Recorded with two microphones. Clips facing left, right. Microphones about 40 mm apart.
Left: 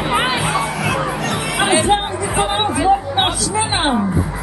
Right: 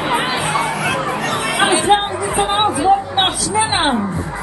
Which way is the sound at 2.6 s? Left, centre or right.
Centre.